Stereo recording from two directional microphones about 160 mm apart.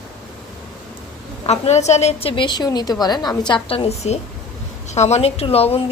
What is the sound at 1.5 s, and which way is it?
A woman's voice, 45° left (ahead or behind).